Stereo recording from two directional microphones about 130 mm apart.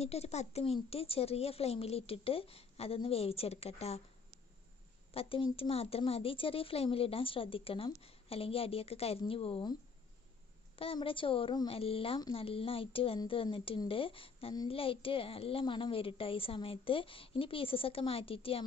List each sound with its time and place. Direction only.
0.0 s speech: 55° left (ahead or behind)
5.1 s speech: 45° left (ahead or behind)
10.8 s speech: 45° left (ahead or behind)